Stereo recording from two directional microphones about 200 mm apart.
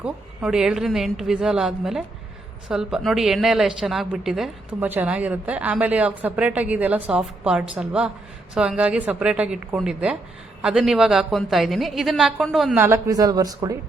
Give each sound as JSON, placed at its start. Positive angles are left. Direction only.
{"t": 0.0, "sound": "a woman's voice", "side_deg": -5}
{"t": 12.8, "sound": "speech", "side_deg": -15}